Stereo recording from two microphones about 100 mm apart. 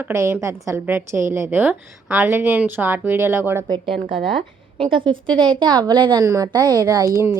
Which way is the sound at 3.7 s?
55° right (ahead or behind).